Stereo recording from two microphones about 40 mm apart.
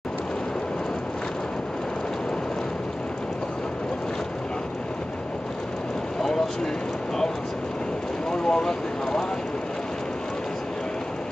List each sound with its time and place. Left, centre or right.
8.3 s speech: centre